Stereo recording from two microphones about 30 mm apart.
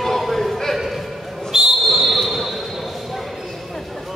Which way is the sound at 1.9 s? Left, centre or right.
Centre.